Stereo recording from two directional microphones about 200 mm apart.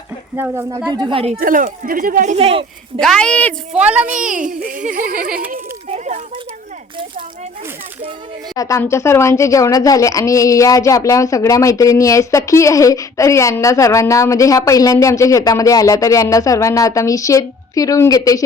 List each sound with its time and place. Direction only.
0.3 s speech: 10° right (ahead or behind)
0.9 s speech: 30° right (ahead or behind)
1.4 s speech: 40° right (ahead or behind)
3.0 s a woman's voice: 5° left (ahead or behind)
3.8 s speech: 5° right (ahead or behind)
4.1 s a child's voice: 40° right (ahead or behind)
5.9 s a sound: 35° right (ahead or behind)
8.5 s speech: 15° left (ahead or behind)